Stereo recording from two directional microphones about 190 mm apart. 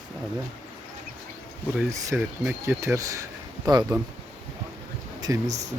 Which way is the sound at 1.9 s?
15° right (ahead or behind).